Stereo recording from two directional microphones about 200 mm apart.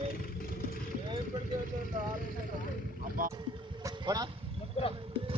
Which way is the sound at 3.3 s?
15° right (ahead or behind).